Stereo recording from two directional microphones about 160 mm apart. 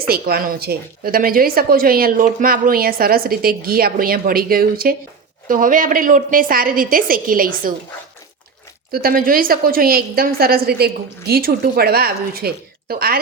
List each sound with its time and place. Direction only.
0.1 s a woman's voice: 70° right (ahead or behind)
8.9 s a woman's voice: 65° right (ahead or behind)